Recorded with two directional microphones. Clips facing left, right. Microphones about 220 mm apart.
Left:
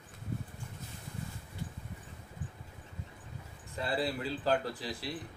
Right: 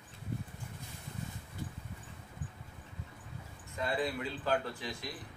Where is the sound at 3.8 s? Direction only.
35° left (ahead or behind).